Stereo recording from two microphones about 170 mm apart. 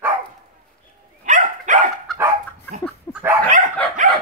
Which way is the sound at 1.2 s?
50° right (ahead or behind).